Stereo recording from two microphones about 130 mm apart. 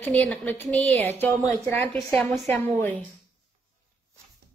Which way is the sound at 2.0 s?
10° left (ahead or behind).